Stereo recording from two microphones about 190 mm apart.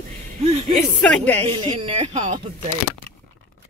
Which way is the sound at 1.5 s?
25° right (ahead or behind).